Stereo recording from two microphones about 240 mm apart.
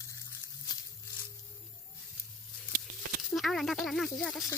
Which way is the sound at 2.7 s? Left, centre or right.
Right.